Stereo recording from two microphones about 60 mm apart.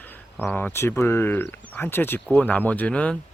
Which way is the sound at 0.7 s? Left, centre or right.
Left.